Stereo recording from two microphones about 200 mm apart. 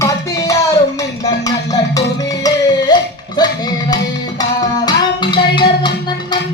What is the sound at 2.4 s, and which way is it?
Music, 20° left (ahead or behind).